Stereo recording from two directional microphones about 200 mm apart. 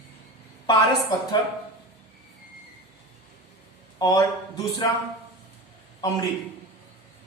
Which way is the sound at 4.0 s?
20° left (ahead or behind).